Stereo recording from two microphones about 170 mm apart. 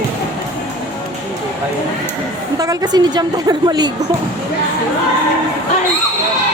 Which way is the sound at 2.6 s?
20° right (ahead or behind).